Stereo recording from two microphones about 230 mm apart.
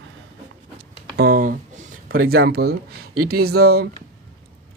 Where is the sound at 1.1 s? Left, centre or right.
Right.